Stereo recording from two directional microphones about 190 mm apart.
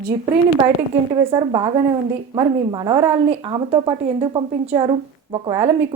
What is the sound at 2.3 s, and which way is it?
Speech, 25° right (ahead or behind).